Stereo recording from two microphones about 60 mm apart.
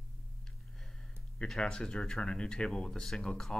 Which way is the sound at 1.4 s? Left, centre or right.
Centre.